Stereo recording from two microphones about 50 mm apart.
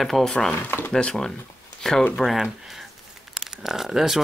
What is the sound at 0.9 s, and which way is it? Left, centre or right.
Speech, centre.